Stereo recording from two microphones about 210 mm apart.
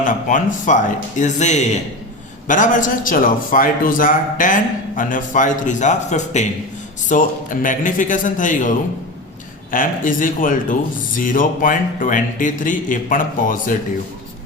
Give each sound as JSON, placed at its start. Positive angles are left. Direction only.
{"t": 0.0, "sound": "speech", "side_deg": 40}
{"t": 9.7, "sound": "speech", "side_deg": 40}